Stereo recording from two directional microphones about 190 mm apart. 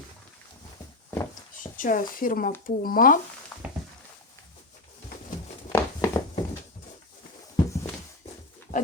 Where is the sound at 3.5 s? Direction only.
5° left (ahead or behind).